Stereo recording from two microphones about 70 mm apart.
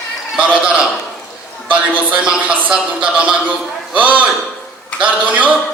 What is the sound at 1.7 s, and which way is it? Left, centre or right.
A man's voice, centre.